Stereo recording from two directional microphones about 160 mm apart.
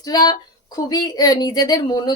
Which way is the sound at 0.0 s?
25° left (ahead or behind).